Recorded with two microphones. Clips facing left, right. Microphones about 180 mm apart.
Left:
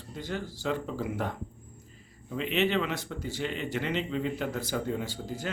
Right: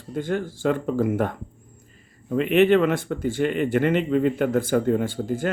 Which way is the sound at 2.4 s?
55° right (ahead or behind).